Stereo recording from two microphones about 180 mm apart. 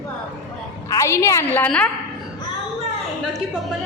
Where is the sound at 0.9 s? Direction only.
15° left (ahead or behind).